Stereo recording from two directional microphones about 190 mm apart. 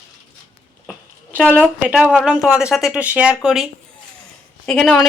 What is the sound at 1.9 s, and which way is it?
Speech, centre (ahead or behind).